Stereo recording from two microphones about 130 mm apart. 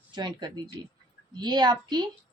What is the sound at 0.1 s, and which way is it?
Speech, 35° right (ahead or behind).